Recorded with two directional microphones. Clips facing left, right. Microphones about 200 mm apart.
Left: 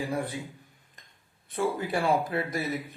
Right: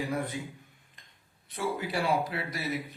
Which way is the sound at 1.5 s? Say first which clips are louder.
Left 4 dB; 50° left (ahead or behind).